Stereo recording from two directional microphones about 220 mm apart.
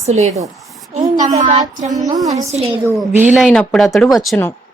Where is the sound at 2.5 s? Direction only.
30° right (ahead or behind).